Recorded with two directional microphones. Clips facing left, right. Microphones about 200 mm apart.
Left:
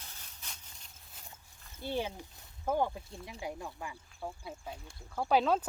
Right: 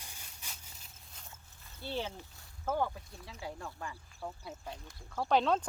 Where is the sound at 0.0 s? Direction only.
10° right (ahead or behind).